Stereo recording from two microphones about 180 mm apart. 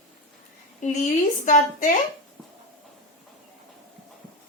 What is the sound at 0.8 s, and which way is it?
A woman's voice, 45° left (ahead or behind).